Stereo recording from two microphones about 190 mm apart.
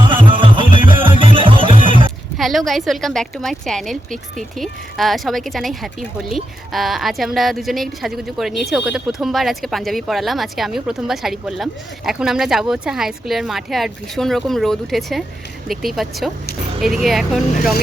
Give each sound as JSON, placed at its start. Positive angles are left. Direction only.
{"t": 0.1, "sound": "music", "side_deg": -25}
{"t": 2.4, "sound": "speech", "side_deg": 0}